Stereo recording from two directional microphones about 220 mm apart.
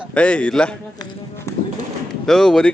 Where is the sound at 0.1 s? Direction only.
5° left (ahead or behind).